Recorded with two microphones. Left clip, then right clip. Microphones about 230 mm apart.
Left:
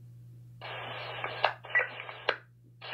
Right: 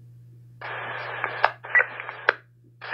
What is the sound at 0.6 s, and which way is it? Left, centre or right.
Radio, right.